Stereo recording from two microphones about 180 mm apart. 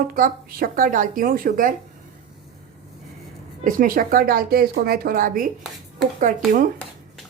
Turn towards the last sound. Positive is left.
turn(degrees=-45)  # may be behind; listen again after turning